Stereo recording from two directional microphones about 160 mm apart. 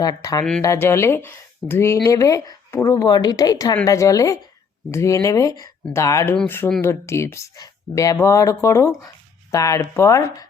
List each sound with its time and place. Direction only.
0.0 s speech: 25° left (ahead or behind)